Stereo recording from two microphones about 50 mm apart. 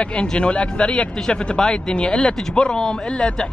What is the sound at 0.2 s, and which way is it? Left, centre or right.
Speech, left.